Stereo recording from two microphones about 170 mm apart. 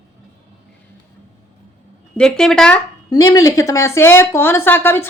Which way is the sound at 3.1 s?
20° left (ahead or behind).